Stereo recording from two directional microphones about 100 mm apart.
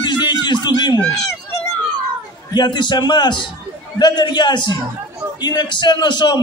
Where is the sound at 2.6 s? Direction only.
50° left (ahead or behind).